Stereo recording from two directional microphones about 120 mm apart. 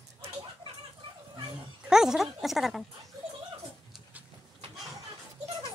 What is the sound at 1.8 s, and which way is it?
Speech, 5° right (ahead or behind).